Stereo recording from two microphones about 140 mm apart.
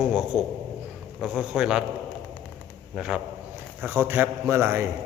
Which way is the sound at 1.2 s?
5° right (ahead or behind).